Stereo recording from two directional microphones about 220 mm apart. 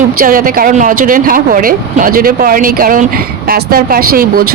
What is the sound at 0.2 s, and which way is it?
Speech, 40° right (ahead or behind).